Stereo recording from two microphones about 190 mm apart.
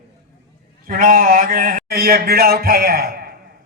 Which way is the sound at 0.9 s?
50° right (ahead or behind).